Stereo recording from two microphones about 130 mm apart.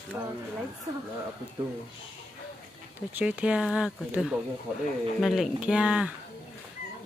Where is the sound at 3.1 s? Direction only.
10° right (ahead or behind).